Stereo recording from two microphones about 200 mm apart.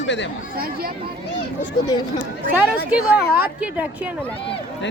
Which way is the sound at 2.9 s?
5° right (ahead or behind).